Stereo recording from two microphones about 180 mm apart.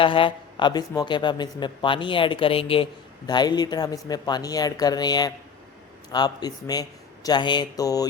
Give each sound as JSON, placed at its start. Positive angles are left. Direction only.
{"t": 0.0, "sound": "speech", "side_deg": 30}